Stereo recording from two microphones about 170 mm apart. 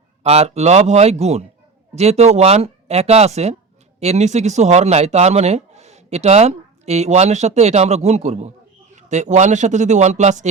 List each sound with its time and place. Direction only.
0.2 s a man's voice: 40° right (ahead or behind)